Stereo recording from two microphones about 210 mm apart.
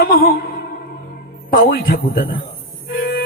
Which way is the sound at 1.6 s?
45° left (ahead or behind).